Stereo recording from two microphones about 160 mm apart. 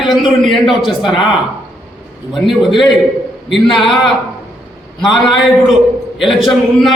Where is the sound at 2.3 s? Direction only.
Centre (ahead or behind).